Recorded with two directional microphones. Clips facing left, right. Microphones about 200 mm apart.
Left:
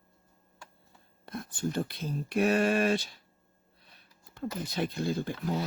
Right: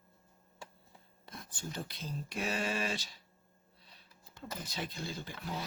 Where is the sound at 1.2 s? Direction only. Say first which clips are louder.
Left 12 dB; 55° left (ahead or behind).